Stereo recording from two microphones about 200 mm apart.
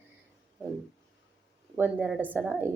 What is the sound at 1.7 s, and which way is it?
Speech, 5° right (ahead or behind).